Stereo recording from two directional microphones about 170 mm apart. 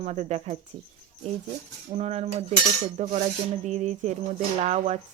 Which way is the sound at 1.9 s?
40° right (ahead or behind).